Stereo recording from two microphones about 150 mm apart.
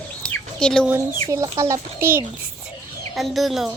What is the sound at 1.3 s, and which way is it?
Speech, 20° right (ahead or behind).